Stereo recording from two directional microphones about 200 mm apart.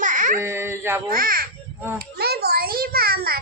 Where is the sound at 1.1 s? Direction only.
45° right (ahead or behind).